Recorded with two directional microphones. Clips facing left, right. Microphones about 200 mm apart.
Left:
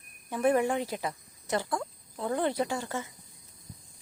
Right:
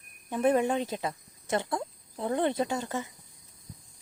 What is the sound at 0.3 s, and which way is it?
Speech, 20° right (ahead or behind).